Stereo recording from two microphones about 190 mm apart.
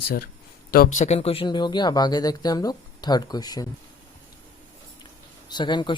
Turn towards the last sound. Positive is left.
turn(degrees=25)  # may be behind; listen again after turning